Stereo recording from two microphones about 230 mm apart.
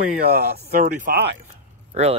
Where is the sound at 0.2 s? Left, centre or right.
Right.